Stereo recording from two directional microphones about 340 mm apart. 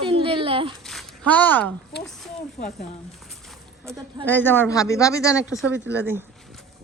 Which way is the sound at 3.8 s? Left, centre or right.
Centre.